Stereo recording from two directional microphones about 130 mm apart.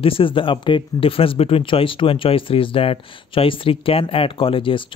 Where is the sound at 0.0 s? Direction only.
45° left (ahead or behind).